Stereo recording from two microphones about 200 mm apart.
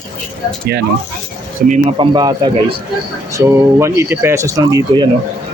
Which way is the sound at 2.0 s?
20° right (ahead or behind).